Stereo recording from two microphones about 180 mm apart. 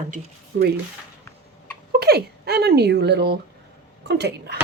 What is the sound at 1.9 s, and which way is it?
Speech, 60° right (ahead or behind).